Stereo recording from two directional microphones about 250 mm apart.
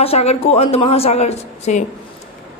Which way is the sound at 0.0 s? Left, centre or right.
Left.